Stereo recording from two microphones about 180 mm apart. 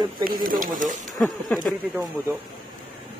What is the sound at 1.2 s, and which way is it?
Speech, 5° left (ahead or behind).